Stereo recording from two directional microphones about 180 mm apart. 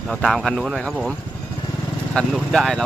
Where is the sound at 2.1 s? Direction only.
5° left (ahead or behind).